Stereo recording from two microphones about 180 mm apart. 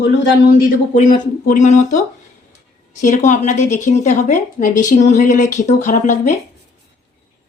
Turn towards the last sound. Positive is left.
turn(degrees=45)  # may be behind; listen again after turning